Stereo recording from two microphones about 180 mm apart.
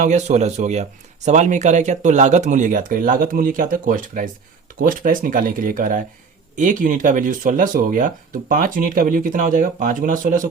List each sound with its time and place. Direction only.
0.0 s speech: 40° right (ahead or behind)